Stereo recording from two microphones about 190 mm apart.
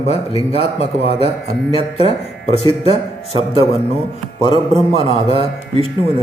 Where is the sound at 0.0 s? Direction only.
30° left (ahead or behind).